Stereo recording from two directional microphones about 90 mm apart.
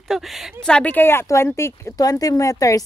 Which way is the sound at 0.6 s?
15° left (ahead or behind).